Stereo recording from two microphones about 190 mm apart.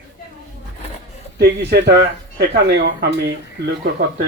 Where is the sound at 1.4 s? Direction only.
60° right (ahead or behind).